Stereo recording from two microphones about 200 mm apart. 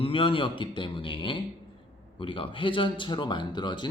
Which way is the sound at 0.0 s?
25° left (ahead or behind).